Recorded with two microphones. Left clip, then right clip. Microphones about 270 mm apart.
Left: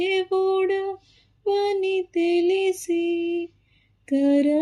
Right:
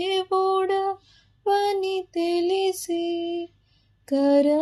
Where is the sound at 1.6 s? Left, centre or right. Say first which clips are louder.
Left 1 dB; right.